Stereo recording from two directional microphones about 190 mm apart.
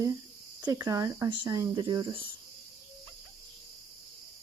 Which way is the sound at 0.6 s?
20° right (ahead or behind).